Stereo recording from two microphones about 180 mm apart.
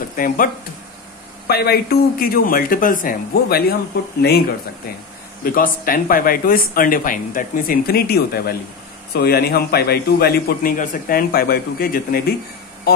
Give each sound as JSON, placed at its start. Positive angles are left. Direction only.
{"t": 0.1, "sound": "speech", "side_deg": 50}
{"t": 1.5, "sound": "speech", "side_deg": 60}
{"t": 5.4, "sound": "a man's voice", "side_deg": 50}